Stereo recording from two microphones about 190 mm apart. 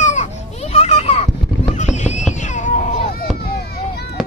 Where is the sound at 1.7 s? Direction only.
40° left (ahead or behind).